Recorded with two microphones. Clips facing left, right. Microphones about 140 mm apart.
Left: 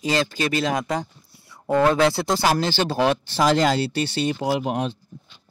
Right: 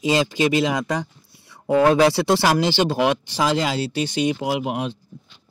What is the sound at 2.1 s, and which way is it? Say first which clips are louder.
Speech: right 3 dB; 70° right (ahead or behind).